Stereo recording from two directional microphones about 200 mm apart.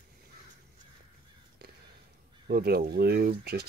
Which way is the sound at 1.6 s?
55° right (ahead or behind).